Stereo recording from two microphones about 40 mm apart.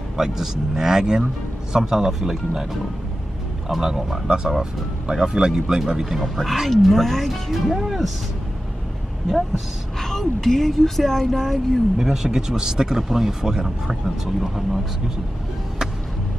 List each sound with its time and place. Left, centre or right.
0.2 s speech: centre
3.6 s speech: centre
4.3 s speech: centre
6.2 s speech: centre
9.9 s a woman's voice: centre
12.0 s speech: centre